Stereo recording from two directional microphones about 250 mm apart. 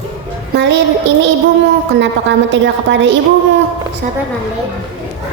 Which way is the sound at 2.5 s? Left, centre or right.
Right.